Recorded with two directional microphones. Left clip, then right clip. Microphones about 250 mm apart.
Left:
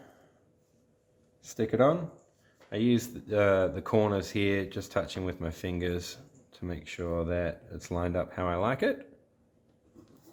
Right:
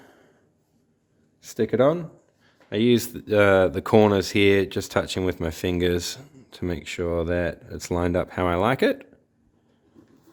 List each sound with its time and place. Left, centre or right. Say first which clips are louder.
1.4 s speech: right 5 dB; right